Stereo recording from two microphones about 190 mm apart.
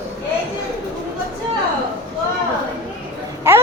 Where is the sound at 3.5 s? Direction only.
15° right (ahead or behind).